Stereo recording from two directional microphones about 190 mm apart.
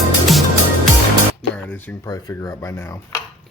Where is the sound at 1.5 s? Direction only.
10° left (ahead or behind).